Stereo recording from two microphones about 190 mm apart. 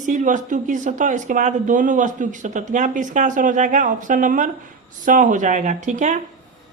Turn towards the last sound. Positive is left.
turn(degrees=-40)  # may be behind; listen again after turning